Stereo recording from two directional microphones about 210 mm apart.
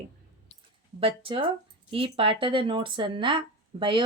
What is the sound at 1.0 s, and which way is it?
Speech, 25° right (ahead or behind).